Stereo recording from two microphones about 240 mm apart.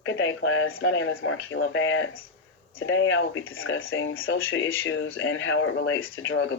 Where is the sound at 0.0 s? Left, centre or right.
Left.